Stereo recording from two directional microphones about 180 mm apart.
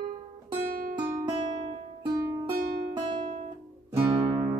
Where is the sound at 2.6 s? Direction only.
55° right (ahead or behind).